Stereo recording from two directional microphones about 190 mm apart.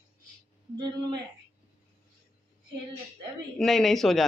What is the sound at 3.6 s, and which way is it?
Speech, centre (ahead or behind).